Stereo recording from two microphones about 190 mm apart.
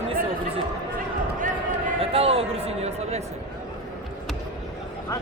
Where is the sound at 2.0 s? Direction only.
30° right (ahead or behind).